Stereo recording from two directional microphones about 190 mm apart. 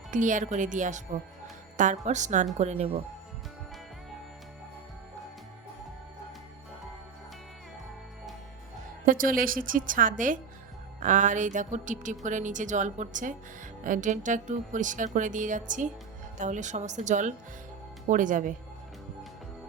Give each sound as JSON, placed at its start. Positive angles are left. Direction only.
{"t": 0.1, "sound": "speech", "side_deg": -40}
{"t": 9.0, "sound": "a woman's voice", "side_deg": -45}